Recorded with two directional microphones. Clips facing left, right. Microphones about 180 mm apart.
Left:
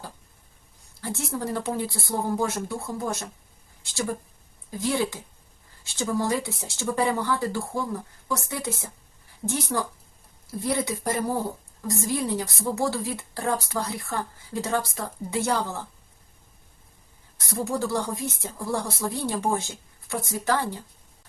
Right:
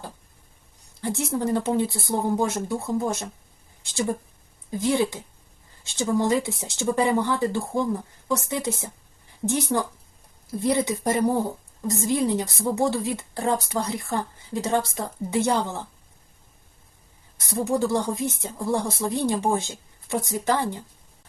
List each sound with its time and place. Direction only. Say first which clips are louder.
1.0 s a woman's voice: right 5 dB; 20° right (ahead or behind)
3.8 s a sound: right 3 dB; 20° right (ahead or behind)
4.7 s a woman's voice: right 3 dB; 20° right (ahead or behind)
17.5 s a woman's voice: right 4 dB; 20° right (ahead or behind)